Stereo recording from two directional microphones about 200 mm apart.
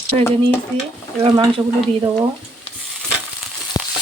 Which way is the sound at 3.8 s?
20° left (ahead or behind).